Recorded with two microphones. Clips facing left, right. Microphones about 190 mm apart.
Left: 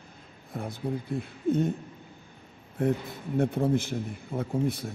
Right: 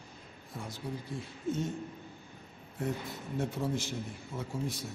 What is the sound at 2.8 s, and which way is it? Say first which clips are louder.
A man's voice: left 8 dB; 55° left (ahead or behind).